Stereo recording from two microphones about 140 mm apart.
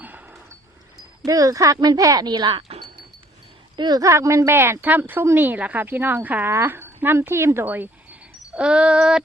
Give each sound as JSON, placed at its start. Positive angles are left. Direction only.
{"t": 0.0, "sound": "a sound", "side_deg": -10}
{"t": 1.2, "sound": "speech", "side_deg": -25}
{"t": 3.8, "sound": "speech", "side_deg": -30}